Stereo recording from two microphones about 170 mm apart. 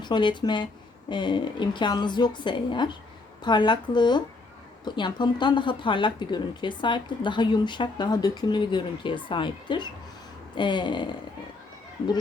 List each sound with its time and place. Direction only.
0.0 s a woman's voice: 25° left (ahead or behind)